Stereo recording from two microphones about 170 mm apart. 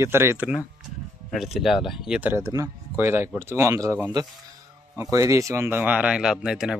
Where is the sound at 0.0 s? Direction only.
15° right (ahead or behind).